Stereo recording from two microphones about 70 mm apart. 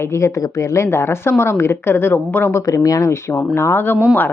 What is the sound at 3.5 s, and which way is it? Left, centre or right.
Speech, left.